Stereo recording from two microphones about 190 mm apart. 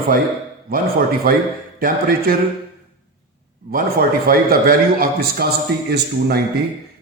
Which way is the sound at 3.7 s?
50° right (ahead or behind).